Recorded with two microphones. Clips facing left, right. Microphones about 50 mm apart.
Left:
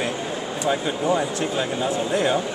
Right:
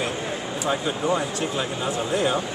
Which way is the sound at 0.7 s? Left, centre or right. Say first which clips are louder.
Left 2 dB; centre.